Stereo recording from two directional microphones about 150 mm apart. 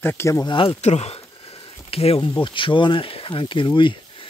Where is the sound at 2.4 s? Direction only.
35° left (ahead or behind).